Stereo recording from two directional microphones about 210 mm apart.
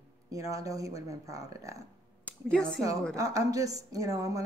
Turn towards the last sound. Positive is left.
turn(degrees=-15)  # may be behind; listen again after turning